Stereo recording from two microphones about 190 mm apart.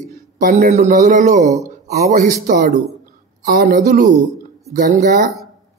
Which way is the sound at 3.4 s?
55° right (ahead or behind).